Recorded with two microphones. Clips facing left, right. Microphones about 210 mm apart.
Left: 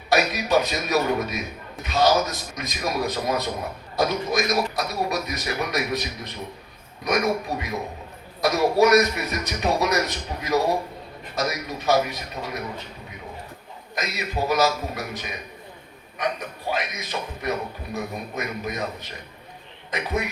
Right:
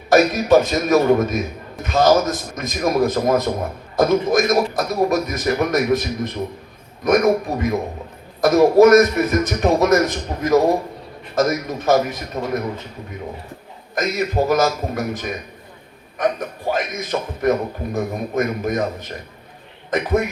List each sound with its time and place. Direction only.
0.1 s a man's voice: 50° right (ahead or behind)
13.9 s a man's voice: 50° right (ahead or behind)